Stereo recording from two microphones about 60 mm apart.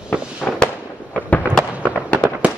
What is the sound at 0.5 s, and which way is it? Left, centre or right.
Fireworks, centre.